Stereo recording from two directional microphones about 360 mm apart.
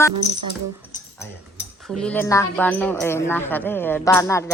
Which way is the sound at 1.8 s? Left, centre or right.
Centre.